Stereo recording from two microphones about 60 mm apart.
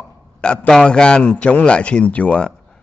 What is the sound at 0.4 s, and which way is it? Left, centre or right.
A man's voice, centre.